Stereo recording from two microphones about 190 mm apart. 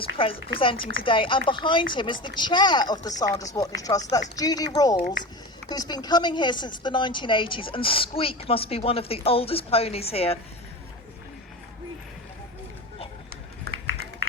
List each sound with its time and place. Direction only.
0.2 s speech: 30° left (ahead or behind)